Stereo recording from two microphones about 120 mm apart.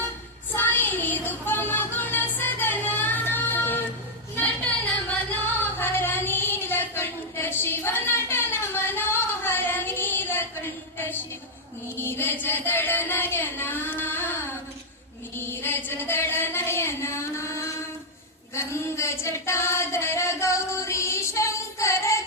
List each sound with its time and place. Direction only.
0.5 s music: 15° left (ahead or behind)
5.5 s a sound: 15° left (ahead or behind)
18.5 s female singing: 25° left (ahead or behind)